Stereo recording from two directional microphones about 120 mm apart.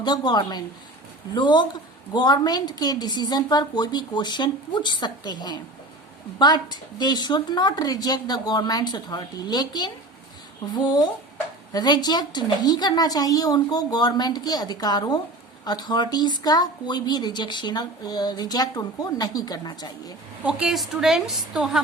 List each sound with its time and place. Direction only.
0.0 s speech: 35° left (ahead or behind)
20.4 s a woman's voice: 5° right (ahead or behind)